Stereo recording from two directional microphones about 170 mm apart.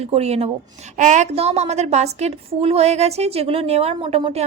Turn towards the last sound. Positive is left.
turn(degrees=-35)  # may be behind; listen again after turning